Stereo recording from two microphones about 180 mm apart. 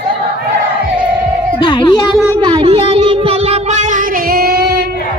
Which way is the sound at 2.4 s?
25° right (ahead or behind).